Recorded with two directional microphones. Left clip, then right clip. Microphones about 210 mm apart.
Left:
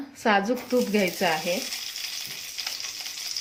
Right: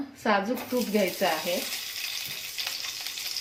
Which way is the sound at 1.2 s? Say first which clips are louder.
Left 2 dB; 45° left (ahead or behind).